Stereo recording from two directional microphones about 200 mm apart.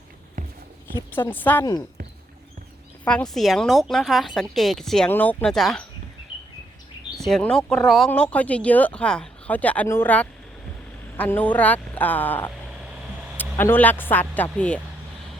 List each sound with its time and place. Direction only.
0.4 s a sound: 40° right (ahead or behind)
0.9 s speech: 10° left (ahead or behind)
3.0 s speech: 5° left (ahead or behind)
7.3 s speech: 5° left (ahead or behind)